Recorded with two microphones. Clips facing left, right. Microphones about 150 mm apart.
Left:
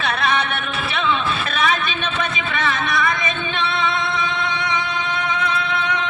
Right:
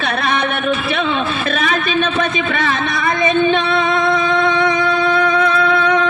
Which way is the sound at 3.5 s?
45° right (ahead or behind).